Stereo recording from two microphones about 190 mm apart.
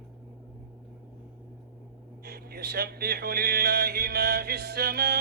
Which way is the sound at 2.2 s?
55° right (ahead or behind).